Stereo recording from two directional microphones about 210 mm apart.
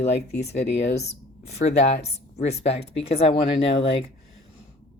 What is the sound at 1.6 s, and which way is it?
Speech, 30° left (ahead or behind).